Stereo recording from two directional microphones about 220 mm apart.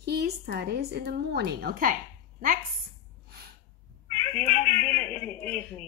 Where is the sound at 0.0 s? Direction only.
45° right (ahead or behind).